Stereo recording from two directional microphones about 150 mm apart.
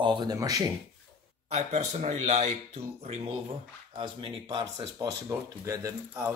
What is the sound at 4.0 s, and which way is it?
Speech, 30° right (ahead or behind).